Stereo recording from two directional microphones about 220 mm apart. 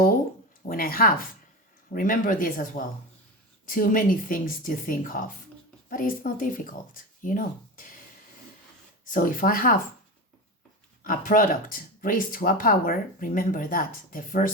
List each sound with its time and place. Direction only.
0.7 s speech: 40° left (ahead or behind)
9.0 s speech: 40° left (ahead or behind)
11.0 s speech: 35° left (ahead or behind)